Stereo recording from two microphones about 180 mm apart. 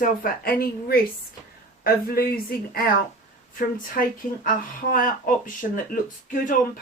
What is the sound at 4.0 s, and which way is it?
A woman's voice, 55° left (ahead or behind).